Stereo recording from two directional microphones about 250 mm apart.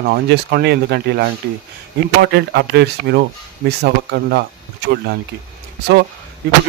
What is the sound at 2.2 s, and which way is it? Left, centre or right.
Speech, right.